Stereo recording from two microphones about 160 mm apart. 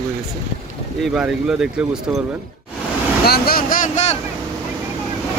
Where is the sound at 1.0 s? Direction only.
5° right (ahead or behind).